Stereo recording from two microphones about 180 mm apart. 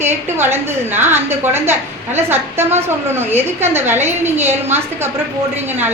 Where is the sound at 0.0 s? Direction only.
10° right (ahead or behind).